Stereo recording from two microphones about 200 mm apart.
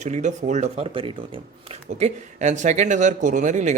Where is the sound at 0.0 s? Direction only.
35° right (ahead or behind).